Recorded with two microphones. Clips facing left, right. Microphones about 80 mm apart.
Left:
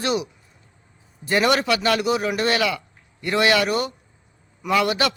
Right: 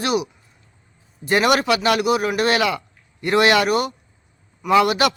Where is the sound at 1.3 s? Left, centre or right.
Centre.